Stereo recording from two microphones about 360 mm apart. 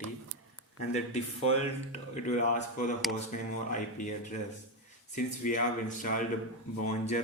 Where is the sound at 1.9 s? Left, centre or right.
Centre.